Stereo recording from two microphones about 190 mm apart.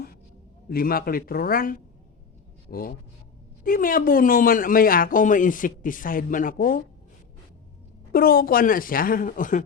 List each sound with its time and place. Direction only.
0.7 s speech: 50° left (ahead or behind)
8.1 s speech: 50° left (ahead or behind)